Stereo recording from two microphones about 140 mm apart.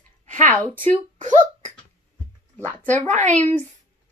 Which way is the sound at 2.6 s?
10° left (ahead or behind).